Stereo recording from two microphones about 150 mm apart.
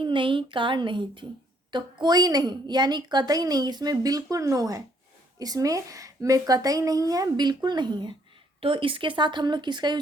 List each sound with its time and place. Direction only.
0.0 s a woman's voice: 35° right (ahead or behind)